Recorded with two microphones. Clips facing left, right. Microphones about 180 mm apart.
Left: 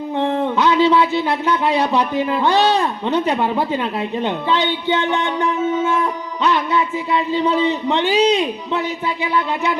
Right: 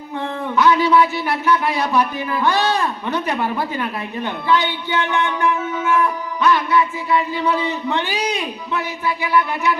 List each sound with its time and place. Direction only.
0.2 s a woman's voice: 20° left (ahead or behind)
4.9 s music: 20° left (ahead or behind)